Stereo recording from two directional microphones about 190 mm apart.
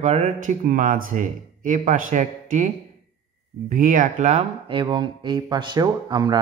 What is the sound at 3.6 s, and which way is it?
Speech, 45° right (ahead or behind).